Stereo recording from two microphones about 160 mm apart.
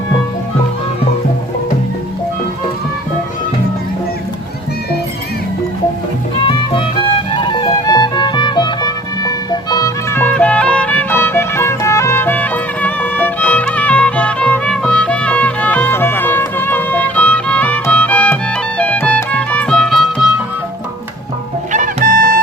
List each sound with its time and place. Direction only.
7.3 s music: 30° left (ahead or behind); by 20.3 s centre (ahead or behind)
21.7 s music: 55° right (ahead or behind)